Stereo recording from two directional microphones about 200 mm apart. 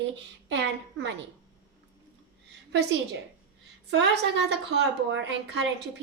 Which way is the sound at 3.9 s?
60° right (ahead or behind).